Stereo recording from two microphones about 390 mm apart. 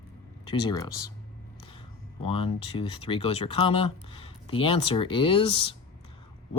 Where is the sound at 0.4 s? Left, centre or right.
Centre.